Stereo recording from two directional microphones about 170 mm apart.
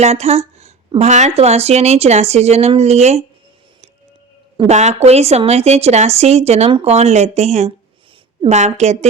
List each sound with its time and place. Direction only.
0.0 s speech: 40° right (ahead or behind)
4.5 s speech: 40° right (ahead or behind)